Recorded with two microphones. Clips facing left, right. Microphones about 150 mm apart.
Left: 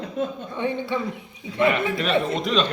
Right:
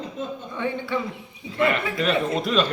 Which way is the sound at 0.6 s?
20° left (ahead or behind).